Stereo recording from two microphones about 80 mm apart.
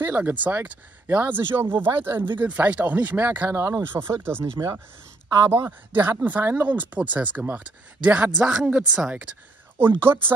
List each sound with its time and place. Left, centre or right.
0.0 s speech: right
3.5 s speech: right; by 8.7 s centre
9.8 s speech: right